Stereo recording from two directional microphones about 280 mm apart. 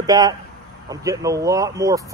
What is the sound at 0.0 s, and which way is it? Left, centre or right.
Speech, centre.